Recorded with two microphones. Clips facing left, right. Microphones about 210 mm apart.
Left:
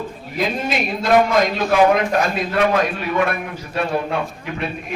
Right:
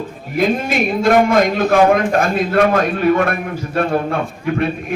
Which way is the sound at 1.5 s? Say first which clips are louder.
Right 3 dB; 50° right (ahead or behind).